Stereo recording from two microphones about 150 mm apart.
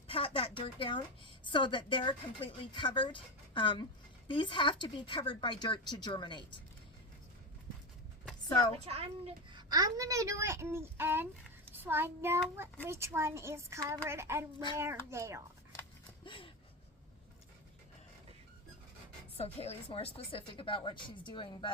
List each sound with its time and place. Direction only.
0.1 s a woman's voice: 35° left (ahead or behind)
8.8 s a woman's voice: 40° right (ahead or behind); by 11.3 s 15° right (ahead or behind)
11.7 s child singing: 15° right (ahead or behind)
12.8 s a woman's voice: 15° right (ahead or behind)
13.8 s a sound: 20° right (ahead or behind)
15.1 s a woman's voice: 20° right (ahead or behind)
16.2 s a sound: 35° left (ahead or behind)
19.4 s a woman's voice: 40° left (ahead or behind)